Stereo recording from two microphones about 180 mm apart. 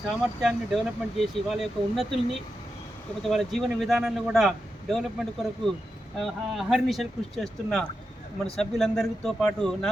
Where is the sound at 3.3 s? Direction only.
Centre (ahead or behind).